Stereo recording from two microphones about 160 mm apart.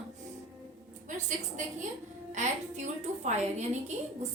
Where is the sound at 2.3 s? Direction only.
50° right (ahead or behind).